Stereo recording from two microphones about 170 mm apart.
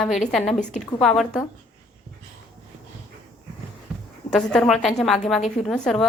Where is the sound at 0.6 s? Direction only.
45° left (ahead or behind).